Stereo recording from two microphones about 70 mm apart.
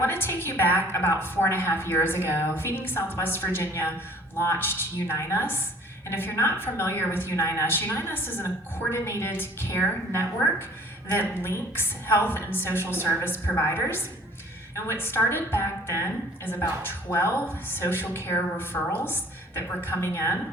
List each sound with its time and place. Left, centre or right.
0.0 s a woman's voice: left